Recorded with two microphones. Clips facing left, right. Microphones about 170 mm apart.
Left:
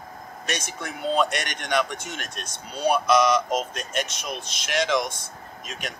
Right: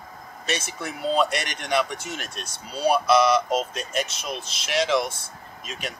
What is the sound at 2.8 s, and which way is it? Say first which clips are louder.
Speech: right 1 dB; 5° right (ahead or behind).